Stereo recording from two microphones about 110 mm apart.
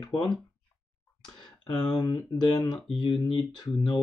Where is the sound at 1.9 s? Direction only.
35° left (ahead or behind).